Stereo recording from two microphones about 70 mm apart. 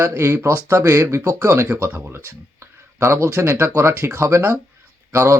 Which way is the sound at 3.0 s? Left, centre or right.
Right.